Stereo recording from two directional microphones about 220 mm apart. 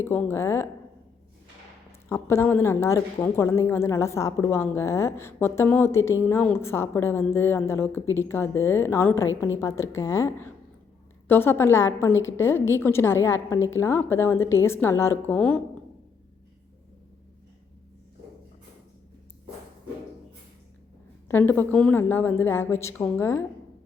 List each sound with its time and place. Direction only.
0.0 s a woman's voice: 10° left (ahead or behind)
2.0 s a woman's voice: 10° left (ahead or behind)
21.2 s a woman's voice: 10° left (ahead or behind)